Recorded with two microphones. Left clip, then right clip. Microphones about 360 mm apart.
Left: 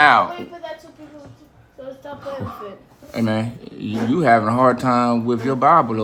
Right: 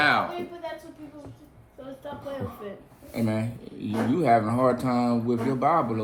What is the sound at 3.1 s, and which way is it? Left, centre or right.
Speech, left.